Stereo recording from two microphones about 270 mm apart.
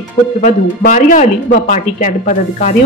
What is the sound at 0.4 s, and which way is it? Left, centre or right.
Speech, left.